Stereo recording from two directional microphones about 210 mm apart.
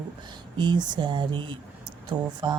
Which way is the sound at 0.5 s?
20° right (ahead or behind).